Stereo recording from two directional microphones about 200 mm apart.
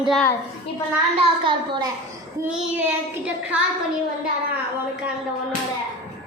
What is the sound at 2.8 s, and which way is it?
Speech, 5° right (ahead or behind).